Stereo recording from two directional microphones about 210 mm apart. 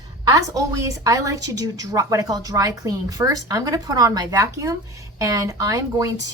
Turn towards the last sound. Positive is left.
turn(degrees=-15)  # may be behind; listen again after turning